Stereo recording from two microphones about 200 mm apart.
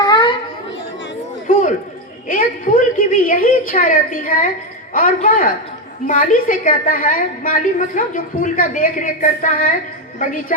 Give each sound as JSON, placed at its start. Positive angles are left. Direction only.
{"t": 0.0, "sound": "chatter", "side_deg": 20}
{"t": 2.2, "sound": "a sound", "side_deg": 40}
{"t": 4.9, "sound": "a woman's voice", "side_deg": 45}